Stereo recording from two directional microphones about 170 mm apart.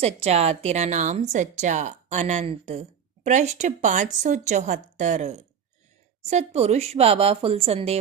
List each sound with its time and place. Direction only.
0.0 s a woman's voice: 35° right (ahead or behind)